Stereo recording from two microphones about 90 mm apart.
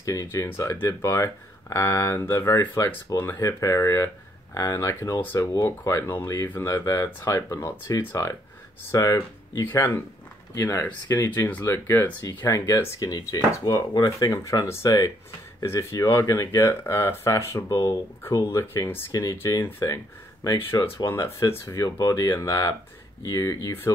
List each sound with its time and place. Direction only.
0.0 s speech: 35° left (ahead or behind)
5.5 s speech: 35° left (ahead or behind)